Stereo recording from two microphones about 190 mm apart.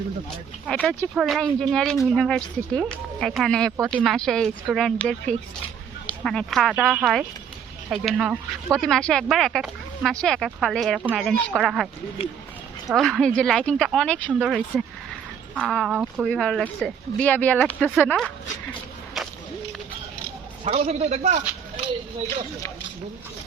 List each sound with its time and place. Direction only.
0.7 s speech: 5° left (ahead or behind)
12.9 s speech: centre (ahead or behind)
20.7 s a man's voice: 35° right (ahead or behind)